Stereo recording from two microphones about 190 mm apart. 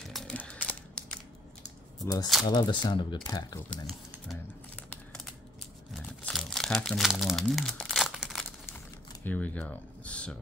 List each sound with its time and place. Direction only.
0.1 s a sound: 5° left (ahead or behind)
2.4 s speech: 25° left (ahead or behind)
3.7 s typing: 5° left (ahead or behind)
5.9 s crumpling: 5° left (ahead or behind)
9.2 s speech: 10° left (ahead or behind)